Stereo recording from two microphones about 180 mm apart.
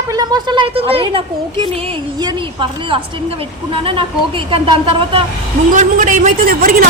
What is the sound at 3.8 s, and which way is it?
A woman's voice, 30° right (ahead or behind).